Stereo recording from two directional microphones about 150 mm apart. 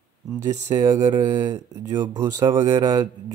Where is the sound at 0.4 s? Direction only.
20° right (ahead or behind).